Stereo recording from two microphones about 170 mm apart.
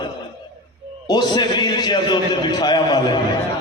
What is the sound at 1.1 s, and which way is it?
A man's voice, 25° left (ahead or behind).